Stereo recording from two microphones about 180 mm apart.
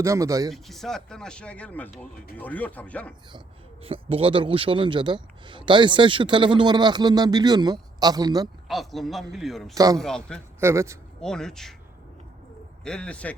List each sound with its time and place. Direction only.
0.0 s speech: 15° right (ahead or behind)
0.5 s speech: centre (ahead or behind)
3.8 s a man's voice: 30° right (ahead or behind)
8.6 s speech: centre (ahead or behind)
9.7 s a man's voice: 20° right (ahead or behind)
10.0 s speech: 5° left (ahead or behind)
10.6 s speech: 15° right (ahead or behind)
11.2 s speech: 5° left (ahead or behind)
12.8 s speech: 5° left (ahead or behind)